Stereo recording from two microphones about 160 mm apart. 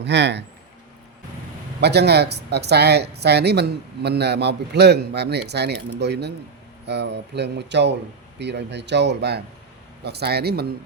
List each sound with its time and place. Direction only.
0.0 s speech: 90° right
1.8 s speech: 90° right